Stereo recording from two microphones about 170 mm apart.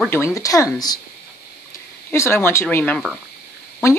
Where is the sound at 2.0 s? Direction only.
15° left (ahead or behind).